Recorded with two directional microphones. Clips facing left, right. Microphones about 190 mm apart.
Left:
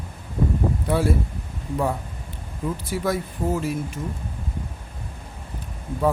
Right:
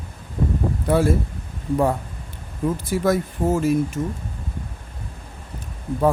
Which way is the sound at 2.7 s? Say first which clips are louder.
Right 4 dB; 45° right (ahead or behind).